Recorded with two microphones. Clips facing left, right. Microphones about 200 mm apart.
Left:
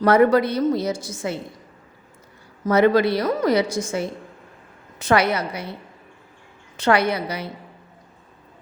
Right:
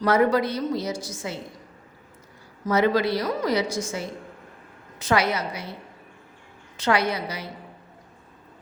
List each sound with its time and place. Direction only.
0.0 s a woman's voice: 55° left (ahead or behind)
2.6 s a woman's voice: 60° left (ahead or behind)
6.7 s a woman's voice: 55° left (ahead or behind)